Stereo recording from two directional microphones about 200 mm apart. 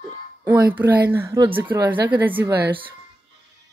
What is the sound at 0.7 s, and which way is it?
A woman's voice, 10° right (ahead or behind).